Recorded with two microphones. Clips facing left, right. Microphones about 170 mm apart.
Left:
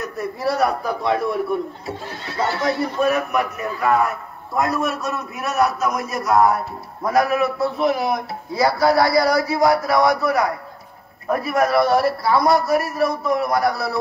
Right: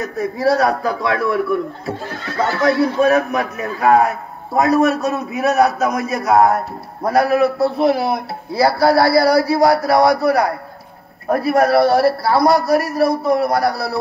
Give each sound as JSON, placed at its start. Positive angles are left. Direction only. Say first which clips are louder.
{"t": 0.0, "sound": "a man's voice", "louder": "right 5 dB", "side_deg": -90}
{"t": 4.6, "sound": "a man's voice", "louder": "right 7 dB", "side_deg": -75}
{"t": 5.6, "sound": "a man's voice", "louder": "right 1 dB", "side_deg": -65}